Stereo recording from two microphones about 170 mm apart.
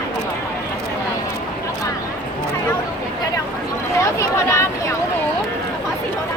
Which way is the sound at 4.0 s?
20° left (ahead or behind).